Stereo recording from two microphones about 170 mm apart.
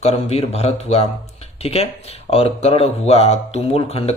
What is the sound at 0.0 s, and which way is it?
Speech, 35° left (ahead or behind).